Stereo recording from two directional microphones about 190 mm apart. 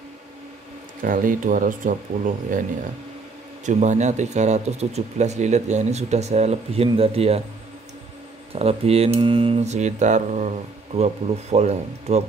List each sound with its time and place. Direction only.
1.0 s speech: 45° right (ahead or behind)
3.6 s speech: 40° right (ahead or behind)
8.5 s speech: 30° right (ahead or behind)